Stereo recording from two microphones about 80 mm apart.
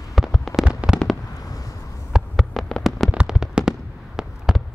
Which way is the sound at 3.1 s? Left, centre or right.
Centre.